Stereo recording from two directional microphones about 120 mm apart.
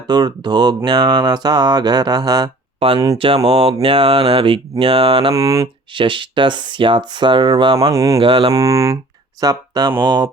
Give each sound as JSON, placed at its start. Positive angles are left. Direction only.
{"t": 0.1, "sound": "mantra", "side_deg": -35}
{"t": 2.8, "sound": "speech", "side_deg": -50}
{"t": 5.3, "sound": "speech", "side_deg": -25}
{"t": 5.9, "sound": "speech", "side_deg": -45}
{"t": 7.8, "sound": "speech", "side_deg": -30}
{"t": 8.2, "sound": "speech", "side_deg": -45}
{"t": 8.5, "sound": "speech", "side_deg": -25}
{"t": 9.4, "sound": "mantra", "side_deg": -35}